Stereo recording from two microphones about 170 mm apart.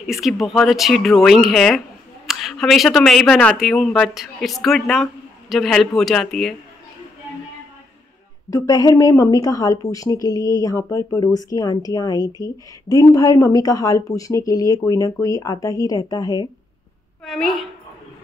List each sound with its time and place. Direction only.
0.0 s speech: centre (ahead or behind)
8.5 s speech: 20° left (ahead or behind)
17.2 s speech: centre (ahead or behind)